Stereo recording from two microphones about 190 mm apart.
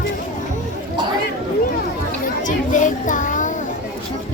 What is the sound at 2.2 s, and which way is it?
Children playing, 40° left (ahead or behind).